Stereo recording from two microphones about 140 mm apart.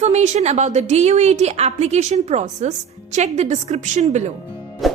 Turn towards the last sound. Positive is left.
turn(degrees=0)  # may be behind; listen again after turning